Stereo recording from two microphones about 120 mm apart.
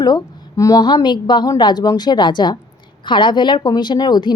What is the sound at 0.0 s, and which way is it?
Speech, 30° left (ahead or behind).